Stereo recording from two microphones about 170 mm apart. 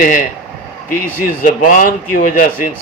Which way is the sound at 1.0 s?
55° left (ahead or behind).